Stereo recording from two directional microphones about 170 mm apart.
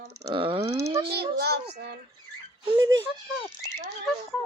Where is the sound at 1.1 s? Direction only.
70° right (ahead or behind).